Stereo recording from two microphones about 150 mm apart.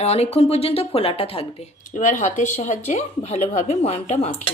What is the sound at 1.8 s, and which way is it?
Speech, 55° left (ahead or behind).